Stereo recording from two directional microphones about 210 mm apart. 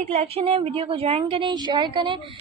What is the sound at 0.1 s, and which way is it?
A woman's voice, 30° right (ahead or behind).